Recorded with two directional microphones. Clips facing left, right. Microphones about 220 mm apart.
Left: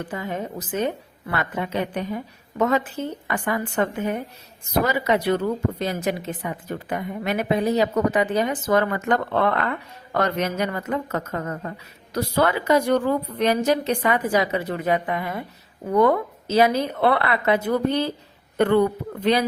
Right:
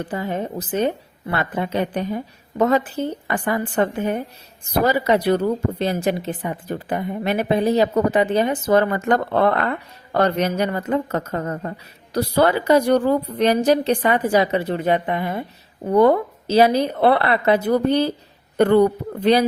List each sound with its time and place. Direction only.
0.0 s speech: 35° right (ahead or behind)